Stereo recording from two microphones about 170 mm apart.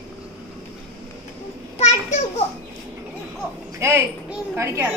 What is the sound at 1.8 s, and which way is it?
Speech, 40° left (ahead or behind).